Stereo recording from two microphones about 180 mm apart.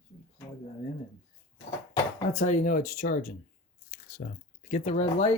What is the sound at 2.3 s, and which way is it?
Speech, 40° left (ahead or behind).